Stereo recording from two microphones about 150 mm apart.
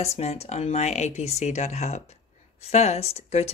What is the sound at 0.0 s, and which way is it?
Speech, 45° left (ahead or behind).